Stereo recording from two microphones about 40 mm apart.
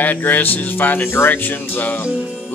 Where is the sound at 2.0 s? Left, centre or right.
Right.